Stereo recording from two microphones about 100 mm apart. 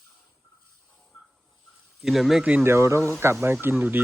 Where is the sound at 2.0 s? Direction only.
Centre (ahead or behind).